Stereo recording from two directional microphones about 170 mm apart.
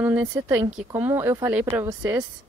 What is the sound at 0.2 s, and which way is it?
Speech, 15° right (ahead or behind).